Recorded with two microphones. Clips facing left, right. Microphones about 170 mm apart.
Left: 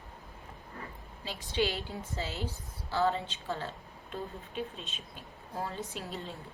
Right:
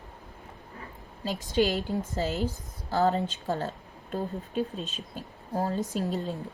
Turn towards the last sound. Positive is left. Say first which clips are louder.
# right 10 dB
turn(degrees=-40)  # may be behind; listen again after turning